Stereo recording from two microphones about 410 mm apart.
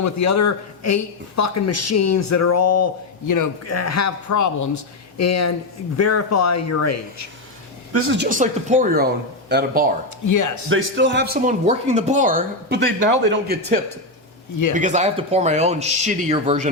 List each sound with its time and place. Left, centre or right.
0.0 s speech: left
7.9 s speech: right
10.2 s speech: left
10.7 s speech: right
14.8 s speech: centre